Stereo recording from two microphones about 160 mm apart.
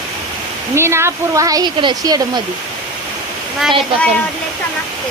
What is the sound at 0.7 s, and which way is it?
Speech, 15° right (ahead or behind).